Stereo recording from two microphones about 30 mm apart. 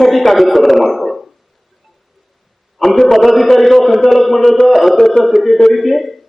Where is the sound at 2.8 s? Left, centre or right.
Centre.